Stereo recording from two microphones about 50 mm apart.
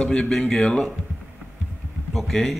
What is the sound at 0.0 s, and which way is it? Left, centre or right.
Speech, centre.